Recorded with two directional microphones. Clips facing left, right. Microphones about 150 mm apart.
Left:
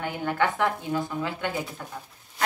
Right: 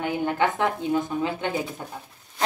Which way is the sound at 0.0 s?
20° right (ahead or behind).